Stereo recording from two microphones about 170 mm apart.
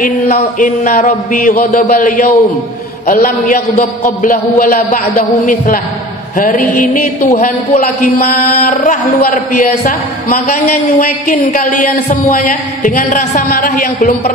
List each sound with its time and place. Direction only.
0.0 s a man's voice: 45° left (ahead or behind)
8.0 s a man's voice: 55° left (ahead or behind)